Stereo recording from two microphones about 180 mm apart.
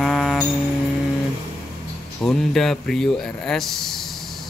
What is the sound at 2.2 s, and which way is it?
Speech, centre (ahead or behind).